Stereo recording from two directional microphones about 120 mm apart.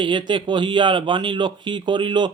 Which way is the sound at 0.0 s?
40° right (ahead or behind).